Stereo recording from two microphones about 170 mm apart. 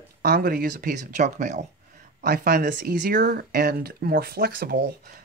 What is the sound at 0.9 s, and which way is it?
Speech, 45° right (ahead or behind).